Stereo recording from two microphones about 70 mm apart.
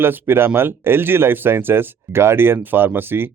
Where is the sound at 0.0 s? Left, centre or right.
Right.